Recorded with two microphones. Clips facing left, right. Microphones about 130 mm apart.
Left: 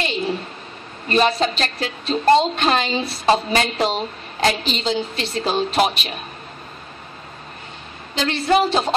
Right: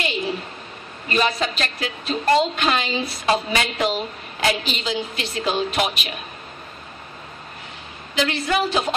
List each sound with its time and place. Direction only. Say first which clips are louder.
1.0 s a woman's voice: left 4 dB; 30° left (ahead or behind)
8.1 s a woman's voice: left 4 dB; 30° left (ahead or behind)